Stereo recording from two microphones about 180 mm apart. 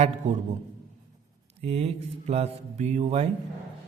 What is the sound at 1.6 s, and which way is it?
A man's voice, 35° right (ahead or behind).